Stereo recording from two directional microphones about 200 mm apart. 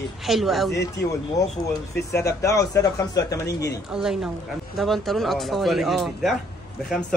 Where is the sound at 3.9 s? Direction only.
5° right (ahead or behind).